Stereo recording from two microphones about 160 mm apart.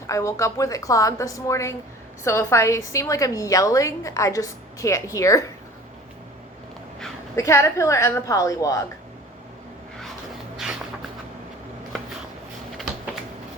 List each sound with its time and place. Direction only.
0.1 s a woman's voice: 20° left (ahead or behind)
7.3 s a woman's voice: 20° left (ahead or behind)